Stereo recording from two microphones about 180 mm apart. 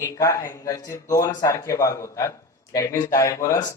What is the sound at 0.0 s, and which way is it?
A man's voice, 20° left (ahead or behind).